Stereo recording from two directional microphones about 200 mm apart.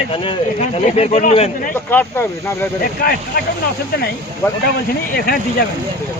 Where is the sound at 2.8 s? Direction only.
50° left (ahead or behind).